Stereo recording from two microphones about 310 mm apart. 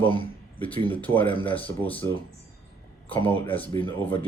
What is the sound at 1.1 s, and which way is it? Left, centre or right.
Speech, centre.